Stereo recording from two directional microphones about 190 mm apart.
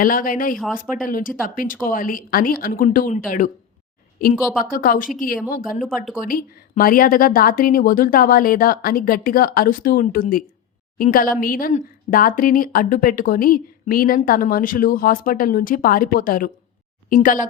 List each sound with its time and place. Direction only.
0.0 s speech: 45° left (ahead or behind)
4.7 s speech: 50° left (ahead or behind)